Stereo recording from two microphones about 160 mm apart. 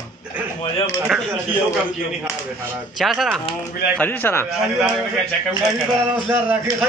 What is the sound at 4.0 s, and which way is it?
Speech, 10° left (ahead or behind).